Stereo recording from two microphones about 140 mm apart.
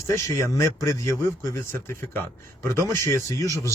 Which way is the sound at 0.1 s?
20° left (ahead or behind).